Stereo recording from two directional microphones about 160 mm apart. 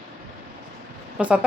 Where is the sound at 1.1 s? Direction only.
5° right (ahead or behind).